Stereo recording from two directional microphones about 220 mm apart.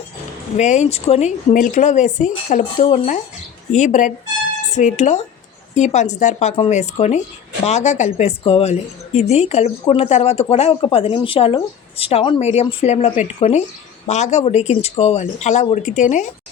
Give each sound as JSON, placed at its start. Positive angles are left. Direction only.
{"t": 0.5, "sound": "a woman's voice", "side_deg": 30}